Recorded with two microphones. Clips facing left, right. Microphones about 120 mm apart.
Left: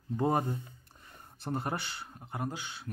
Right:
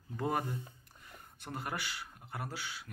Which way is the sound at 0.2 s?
25° left (ahead or behind).